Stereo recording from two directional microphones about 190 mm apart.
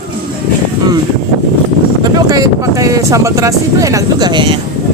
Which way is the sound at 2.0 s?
20° right (ahead or behind).